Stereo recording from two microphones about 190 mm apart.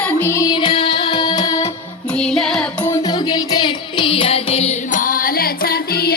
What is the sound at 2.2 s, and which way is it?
Music, centre (ahead or behind).